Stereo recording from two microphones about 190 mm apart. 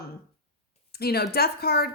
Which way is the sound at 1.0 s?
55° left (ahead or behind).